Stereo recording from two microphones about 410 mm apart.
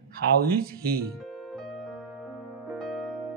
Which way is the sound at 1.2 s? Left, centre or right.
Centre.